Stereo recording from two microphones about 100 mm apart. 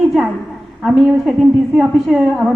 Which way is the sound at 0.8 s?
5° right (ahead or behind).